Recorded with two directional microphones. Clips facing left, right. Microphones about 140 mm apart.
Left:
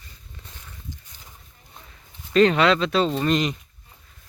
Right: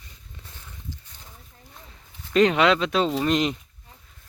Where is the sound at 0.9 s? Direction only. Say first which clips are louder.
Right 1 dB; 15° left (ahead or behind).